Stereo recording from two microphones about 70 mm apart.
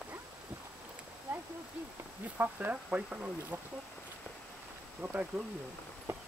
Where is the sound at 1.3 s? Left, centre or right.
Right.